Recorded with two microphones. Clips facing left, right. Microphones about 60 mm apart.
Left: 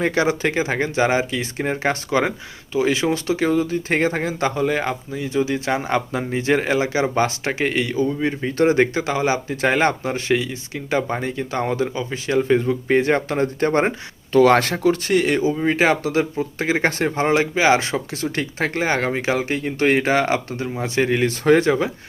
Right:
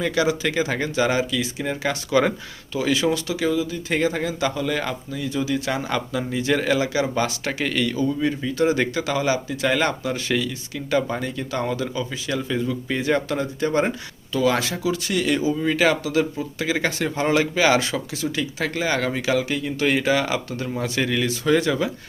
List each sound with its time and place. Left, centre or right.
0.0 s speech: left
14.3 s speech: left